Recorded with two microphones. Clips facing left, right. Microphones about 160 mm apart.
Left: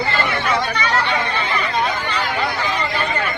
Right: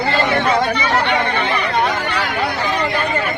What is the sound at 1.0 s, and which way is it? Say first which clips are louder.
Speech: right 3 dB; 65° right (ahead or behind).